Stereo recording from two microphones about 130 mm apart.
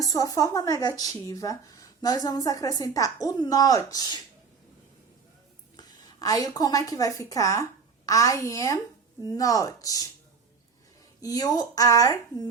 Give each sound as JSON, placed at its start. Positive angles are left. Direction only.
{"t": 0.0, "sound": "speech", "side_deg": 25}
{"t": 5.7, "sound": "a woman's voice", "side_deg": 30}
{"t": 11.2, "sound": "speech", "side_deg": 30}